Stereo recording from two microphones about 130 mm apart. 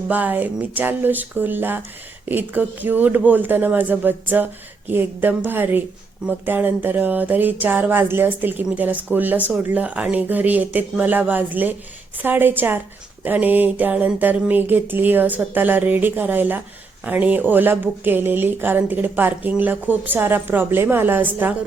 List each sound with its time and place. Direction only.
0.1 s speech: 15° right (ahead or behind)